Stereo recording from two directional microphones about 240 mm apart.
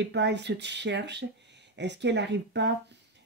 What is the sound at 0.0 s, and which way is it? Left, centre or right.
Speech, right.